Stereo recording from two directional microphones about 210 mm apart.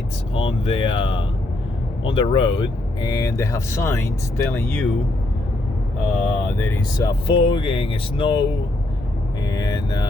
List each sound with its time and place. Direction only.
0.3 s speech: 25° left (ahead or behind); by 4.9 s 10° left (ahead or behind)
6.2 s speech: 10° left (ahead or behind)
7.3 s speech: 25° left (ahead or behind)
9.5 s speech: 20° left (ahead or behind)